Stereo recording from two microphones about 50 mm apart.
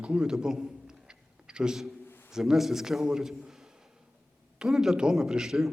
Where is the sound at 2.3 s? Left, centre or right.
Centre.